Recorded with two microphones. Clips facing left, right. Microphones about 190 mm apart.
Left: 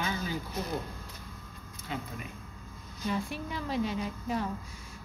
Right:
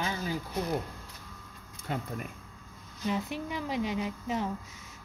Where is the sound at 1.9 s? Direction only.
50° right (ahead or behind).